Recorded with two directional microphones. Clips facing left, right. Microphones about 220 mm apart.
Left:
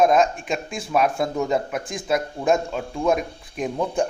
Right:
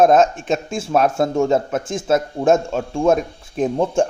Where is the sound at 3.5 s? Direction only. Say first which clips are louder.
Right 6 dB; 30° right (ahead or behind).